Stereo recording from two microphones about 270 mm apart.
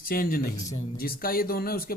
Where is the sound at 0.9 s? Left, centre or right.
Left.